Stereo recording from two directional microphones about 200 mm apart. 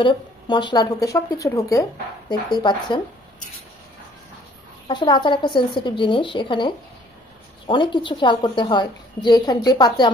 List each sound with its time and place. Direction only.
0.0 s speech: 25° left (ahead or behind)
4.8 s speech: 25° left (ahead or behind)